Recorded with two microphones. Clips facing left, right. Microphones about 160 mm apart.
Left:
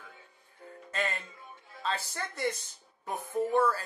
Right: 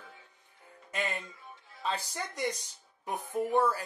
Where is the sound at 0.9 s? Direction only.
15° right (ahead or behind).